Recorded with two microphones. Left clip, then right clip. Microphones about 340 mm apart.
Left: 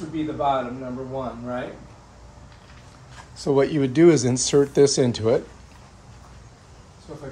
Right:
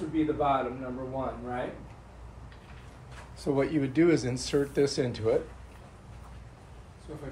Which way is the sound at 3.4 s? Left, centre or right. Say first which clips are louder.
Left 8 dB; left.